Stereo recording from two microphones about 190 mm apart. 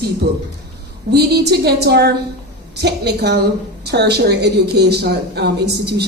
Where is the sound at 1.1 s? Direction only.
60° right (ahead or behind).